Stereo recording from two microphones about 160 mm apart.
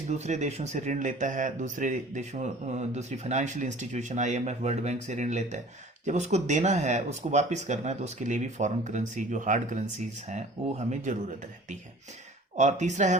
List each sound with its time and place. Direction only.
0.1 s speech: 45° right (ahead or behind)
11.1 s speech: 50° right (ahead or behind)
12.5 s speech: 45° right (ahead or behind)